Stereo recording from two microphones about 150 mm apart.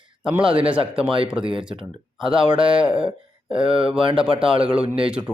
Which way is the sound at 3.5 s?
35° right (ahead or behind).